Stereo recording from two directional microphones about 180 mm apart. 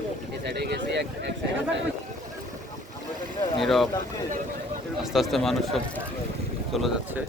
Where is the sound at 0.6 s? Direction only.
70° right (ahead or behind).